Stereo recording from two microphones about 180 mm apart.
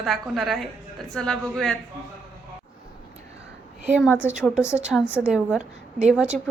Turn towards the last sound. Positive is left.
turn(degrees=-5)  # may be behind; listen again after turning